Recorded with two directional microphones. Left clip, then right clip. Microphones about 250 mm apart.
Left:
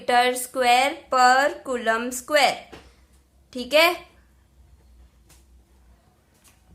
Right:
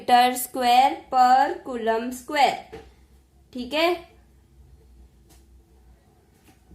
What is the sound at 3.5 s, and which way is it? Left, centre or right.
Speech, centre.